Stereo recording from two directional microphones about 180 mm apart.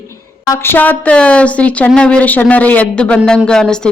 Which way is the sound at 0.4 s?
15° left (ahead or behind).